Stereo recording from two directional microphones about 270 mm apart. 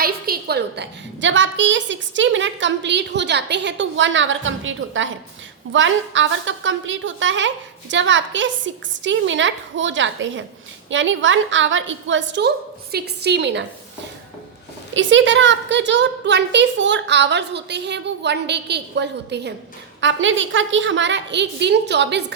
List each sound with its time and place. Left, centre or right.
0.0 s a woman's voice: right
14.9 s a woman's voice: right